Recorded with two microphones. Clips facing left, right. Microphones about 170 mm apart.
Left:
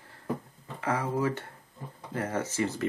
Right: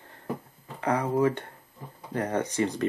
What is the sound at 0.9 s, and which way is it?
Speech, 35° right (ahead or behind).